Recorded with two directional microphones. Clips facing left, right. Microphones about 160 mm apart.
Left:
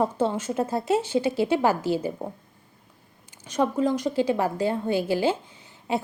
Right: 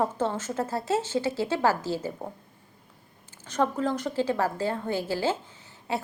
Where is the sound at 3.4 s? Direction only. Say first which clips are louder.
Left 3 dB; 15° left (ahead or behind).